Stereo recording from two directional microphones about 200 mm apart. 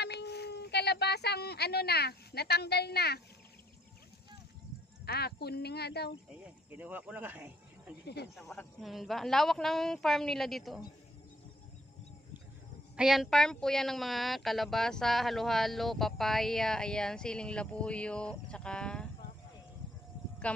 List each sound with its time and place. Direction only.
0.0 s speech: 55° left (ahead or behind)
5.0 s speech: 55° left (ahead or behind)
6.4 s speech: 10° right (ahead or behind)
12.9 s speech: centre (ahead or behind)
20.4 s speech: 5° left (ahead or behind)